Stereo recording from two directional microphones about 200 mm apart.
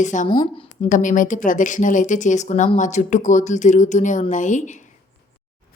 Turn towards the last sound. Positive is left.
turn(degrees=40)  # may be behind; listen again after turning